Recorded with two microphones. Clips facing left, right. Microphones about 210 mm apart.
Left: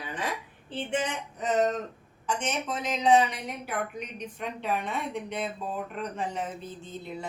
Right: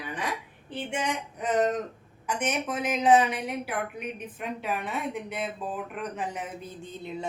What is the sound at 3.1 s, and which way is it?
Speech, 50° right (ahead or behind).